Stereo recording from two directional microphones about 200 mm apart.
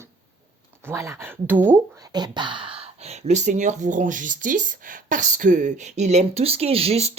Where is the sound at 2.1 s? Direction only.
20° right (ahead or behind).